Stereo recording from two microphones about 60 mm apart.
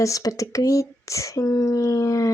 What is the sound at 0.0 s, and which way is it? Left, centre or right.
Speech, left.